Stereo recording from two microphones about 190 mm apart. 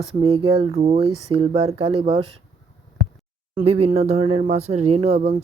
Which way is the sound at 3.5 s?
30° right (ahead or behind).